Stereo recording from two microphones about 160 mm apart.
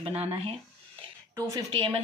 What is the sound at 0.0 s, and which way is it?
Speech, 35° right (ahead or behind).